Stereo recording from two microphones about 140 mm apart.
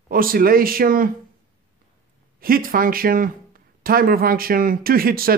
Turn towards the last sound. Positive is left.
turn(degrees=-90)